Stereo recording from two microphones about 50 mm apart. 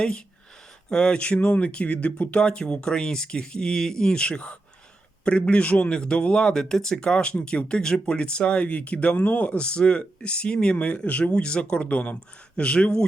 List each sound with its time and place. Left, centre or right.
0.9 s a man's voice: centre